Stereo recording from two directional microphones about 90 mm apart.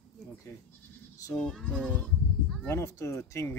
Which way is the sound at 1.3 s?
5° left (ahead or behind).